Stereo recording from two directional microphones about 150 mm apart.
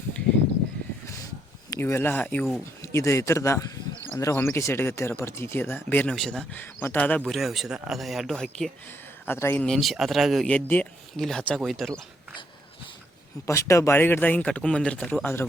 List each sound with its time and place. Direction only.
1.7 s speech: 15° left (ahead or behind)
2.8 s a man's voice: 20° left (ahead or behind)
7.3 s a man's voice: centre (ahead or behind)
9.2 s speech: 15° left (ahead or behind)
9.6 s a man's voice: centre (ahead or behind)
13.5 s speech: 20° left (ahead or behind)